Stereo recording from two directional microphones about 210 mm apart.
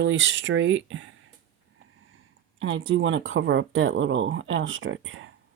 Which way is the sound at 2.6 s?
65° right (ahead or behind).